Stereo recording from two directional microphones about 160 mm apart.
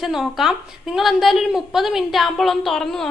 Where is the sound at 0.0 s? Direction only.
Centre (ahead or behind).